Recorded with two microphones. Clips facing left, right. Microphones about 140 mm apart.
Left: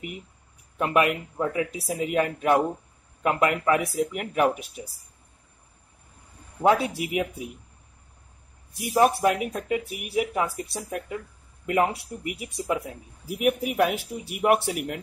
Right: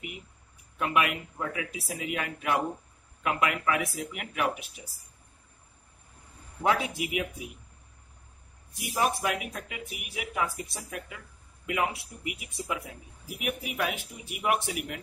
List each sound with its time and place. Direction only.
0.7 s speech: 40° left (ahead or behind)
7.0 s speech: 40° left (ahead or behind)
8.9 s speech: 35° left (ahead or behind)